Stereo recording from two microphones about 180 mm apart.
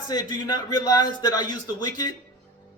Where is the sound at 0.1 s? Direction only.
20° left (ahead or behind).